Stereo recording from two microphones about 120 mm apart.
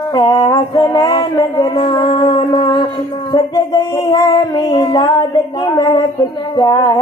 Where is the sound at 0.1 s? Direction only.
35° left (ahead or behind).